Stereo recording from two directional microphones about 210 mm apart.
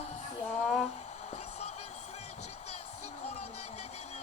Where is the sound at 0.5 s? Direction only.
5° left (ahead or behind).